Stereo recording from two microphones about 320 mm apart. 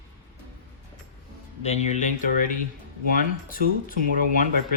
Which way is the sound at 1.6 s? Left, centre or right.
Left.